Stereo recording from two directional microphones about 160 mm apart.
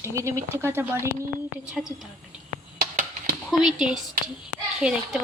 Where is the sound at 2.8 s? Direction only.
65° right (ahead or behind).